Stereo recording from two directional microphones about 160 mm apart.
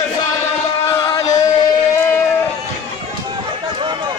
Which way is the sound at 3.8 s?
30° right (ahead or behind).